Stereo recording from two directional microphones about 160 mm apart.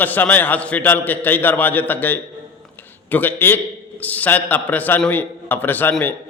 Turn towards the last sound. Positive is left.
turn(degrees=10)  # may be behind; listen again after turning